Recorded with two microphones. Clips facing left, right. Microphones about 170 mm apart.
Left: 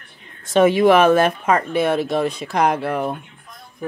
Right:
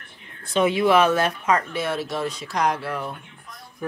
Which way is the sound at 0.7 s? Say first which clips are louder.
Left 3 dB; 50° left (ahead or behind).